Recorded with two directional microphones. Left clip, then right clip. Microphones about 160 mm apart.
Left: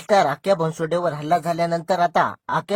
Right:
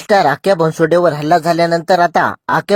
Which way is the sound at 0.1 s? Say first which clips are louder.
Right 6 dB; 40° right (ahead or behind).